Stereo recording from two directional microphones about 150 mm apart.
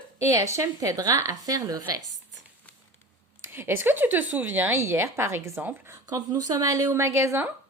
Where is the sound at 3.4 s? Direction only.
15° right (ahead or behind).